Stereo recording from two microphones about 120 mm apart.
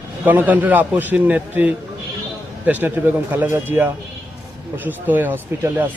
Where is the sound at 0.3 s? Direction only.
15° right (ahead or behind).